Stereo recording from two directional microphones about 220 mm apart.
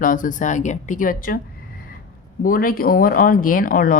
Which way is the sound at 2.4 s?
40° left (ahead or behind).